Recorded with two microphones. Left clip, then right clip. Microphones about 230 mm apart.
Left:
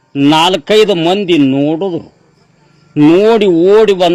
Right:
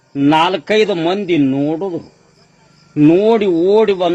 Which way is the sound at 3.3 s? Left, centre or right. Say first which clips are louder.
Left 5 dB; left.